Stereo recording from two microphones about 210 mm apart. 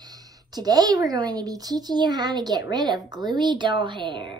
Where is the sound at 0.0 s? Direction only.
20° right (ahead or behind).